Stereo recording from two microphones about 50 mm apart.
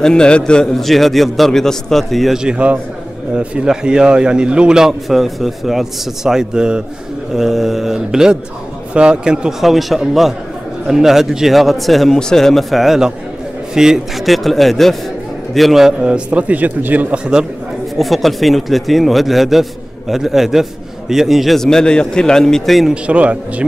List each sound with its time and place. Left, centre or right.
0.0 s a man's voice: centre
2.3 s speech: centre
3.6 s speech: centre
5.0 s speech: centre
7.3 s a man's voice: centre
9.6 s a man's voice: centre
12.7 s speech: centre
14.2 s speech: centre
16.3 s speech: right
17.9 s speech: centre
21.5 s a man's voice: centre
23.0 s a man's voice: right